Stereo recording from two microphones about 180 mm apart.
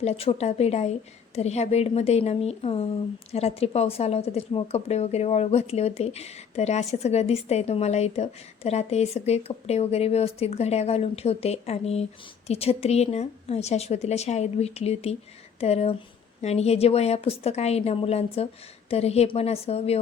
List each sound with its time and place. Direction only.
0.0 s a woman's voice: 35° left (ahead or behind)